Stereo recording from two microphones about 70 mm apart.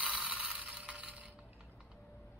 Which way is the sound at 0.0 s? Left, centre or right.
Centre.